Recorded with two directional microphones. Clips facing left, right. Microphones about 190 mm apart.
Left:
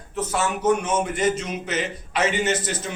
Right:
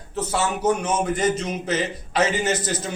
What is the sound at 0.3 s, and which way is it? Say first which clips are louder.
A man's voice: even; 35° right (ahead or behind).